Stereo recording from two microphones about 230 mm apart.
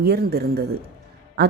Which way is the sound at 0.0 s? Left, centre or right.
Right.